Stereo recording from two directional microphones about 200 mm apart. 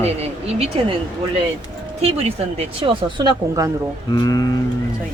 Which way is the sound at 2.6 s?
25° right (ahead or behind).